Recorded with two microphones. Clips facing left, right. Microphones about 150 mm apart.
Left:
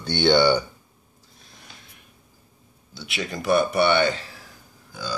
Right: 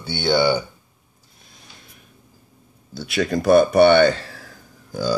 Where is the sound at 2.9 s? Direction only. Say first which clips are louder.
Right 9 dB; 40° right (ahead or behind).